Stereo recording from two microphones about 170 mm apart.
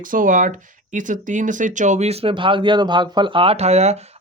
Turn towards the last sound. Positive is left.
turn(degrees=-40)  # may be behind; listen again after turning